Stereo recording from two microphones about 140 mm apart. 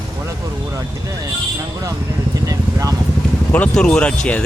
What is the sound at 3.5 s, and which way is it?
Speech, 10° left (ahead or behind).